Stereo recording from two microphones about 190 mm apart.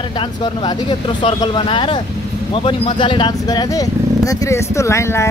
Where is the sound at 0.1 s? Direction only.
25° left (ahead or behind).